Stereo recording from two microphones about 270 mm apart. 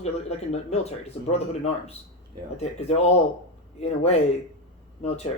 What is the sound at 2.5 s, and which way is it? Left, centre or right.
Speech, left.